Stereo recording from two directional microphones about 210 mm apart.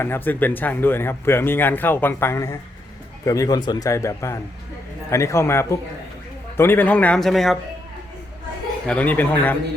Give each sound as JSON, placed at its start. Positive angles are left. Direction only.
{"t": 0.0, "sound": "speech", "side_deg": 10}
{"t": 8.9, "sound": "speech", "side_deg": 5}